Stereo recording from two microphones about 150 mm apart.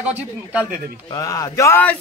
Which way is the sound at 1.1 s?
20° left (ahead or behind).